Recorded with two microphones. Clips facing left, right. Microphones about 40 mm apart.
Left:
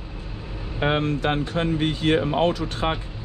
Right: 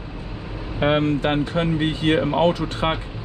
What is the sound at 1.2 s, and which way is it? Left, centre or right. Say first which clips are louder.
Speech: right 2 dB; right.